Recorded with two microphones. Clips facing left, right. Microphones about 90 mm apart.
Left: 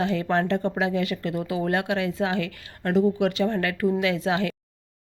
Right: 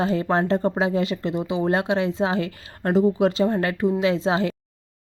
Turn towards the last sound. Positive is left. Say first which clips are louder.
# right 3 dB
turn(degrees=-30)  # may be behind; listen again after turning